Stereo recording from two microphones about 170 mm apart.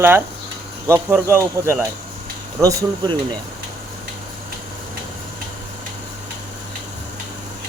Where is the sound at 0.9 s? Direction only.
15° right (ahead or behind).